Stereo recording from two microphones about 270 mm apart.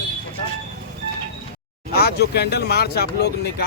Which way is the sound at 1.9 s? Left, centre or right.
Left.